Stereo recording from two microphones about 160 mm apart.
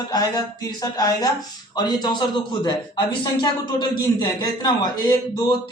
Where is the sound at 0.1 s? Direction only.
20° left (ahead or behind).